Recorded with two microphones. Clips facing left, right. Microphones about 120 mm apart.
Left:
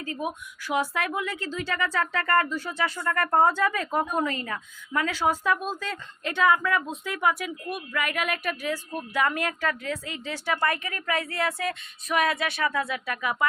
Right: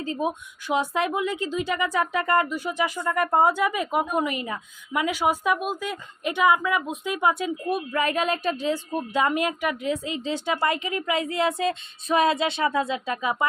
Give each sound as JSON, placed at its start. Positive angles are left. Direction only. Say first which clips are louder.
{"t": 0.0, "sound": "a woman's voice", "louder": "right 5 dB", "side_deg": -25}